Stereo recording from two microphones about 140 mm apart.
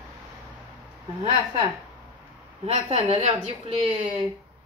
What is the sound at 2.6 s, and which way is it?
A woman's voice, 45° right (ahead or behind).